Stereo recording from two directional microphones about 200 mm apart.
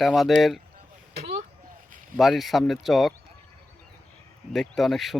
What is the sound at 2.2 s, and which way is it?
Speech, centre (ahead or behind).